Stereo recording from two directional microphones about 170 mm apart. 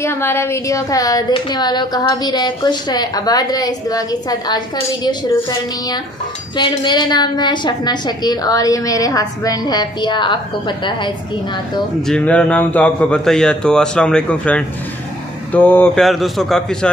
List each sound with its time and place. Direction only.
0.0 s a woman's voice: 15° left (ahead or behind)
6.5 s a woman's voice: 25° left (ahead or behind)
12.1 s a man's voice: 5° left (ahead or behind)